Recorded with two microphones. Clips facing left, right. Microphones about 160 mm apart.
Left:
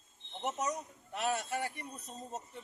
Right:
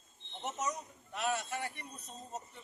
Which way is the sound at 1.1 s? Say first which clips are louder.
Left 1 dB; 40° left (ahead or behind).